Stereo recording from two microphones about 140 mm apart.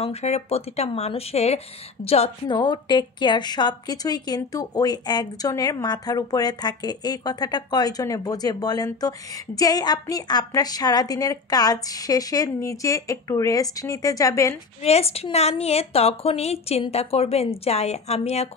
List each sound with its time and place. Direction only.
0.0 s a woman's voice: 50° left (ahead or behind)
2.5 s a woman's voice: 30° left (ahead or behind)
14.8 s a woman's voice: 45° left (ahead or behind)